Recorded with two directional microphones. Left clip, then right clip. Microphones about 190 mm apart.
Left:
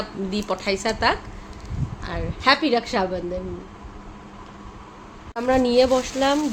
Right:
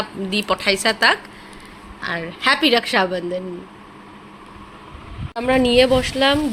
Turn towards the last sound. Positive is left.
turn(degrees=0)  # may be behind; listen again after turning